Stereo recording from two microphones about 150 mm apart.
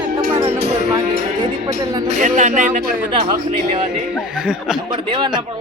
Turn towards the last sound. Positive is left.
turn(degrees=-30)  # may be behind; listen again after turning